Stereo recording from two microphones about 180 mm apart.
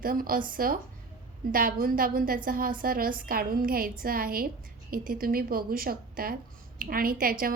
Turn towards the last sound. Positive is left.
turn(degrees=-50)  # may be behind; listen again after turning